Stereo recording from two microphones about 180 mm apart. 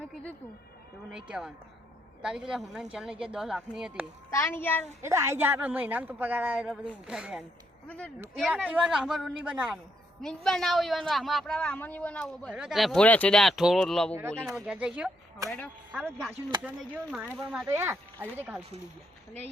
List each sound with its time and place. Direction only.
1.1 s speech: 5° right (ahead or behind)
4.3 s a child's voice: 15° left (ahead or behind)
5.0 s a woman's voice: 15° right (ahead or behind)
7.9 s a child's voice: 5° left (ahead or behind)
15.4 s a child's voice: 10° left (ahead or behind)
16.3 s speech: 25° right (ahead or behind)
16.6 s a woman's voice: 5° right (ahead or behind)
17.7 s a woman's voice: 15° right (ahead or behind)